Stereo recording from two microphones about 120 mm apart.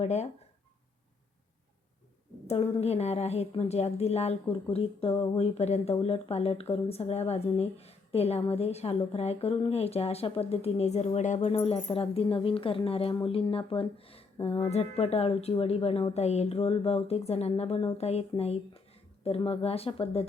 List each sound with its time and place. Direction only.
0.0 s speech: 70° left (ahead or behind)
2.5 s speech: 60° left (ahead or behind)